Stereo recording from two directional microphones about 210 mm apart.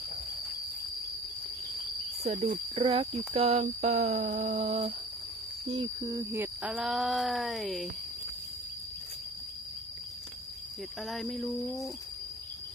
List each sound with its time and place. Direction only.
2.1 s speech: 30° right (ahead or behind)
5.7 s a sound: 20° right (ahead or behind)
6.7 s speech: centre (ahead or behind)
11.0 s speech: centre (ahead or behind)
11.5 s speech: 15° left (ahead or behind)